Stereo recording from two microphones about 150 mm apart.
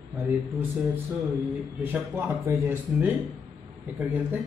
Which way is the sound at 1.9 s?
15° right (ahead or behind).